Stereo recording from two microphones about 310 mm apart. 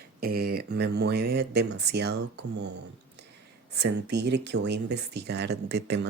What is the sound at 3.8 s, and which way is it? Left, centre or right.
Speech, right.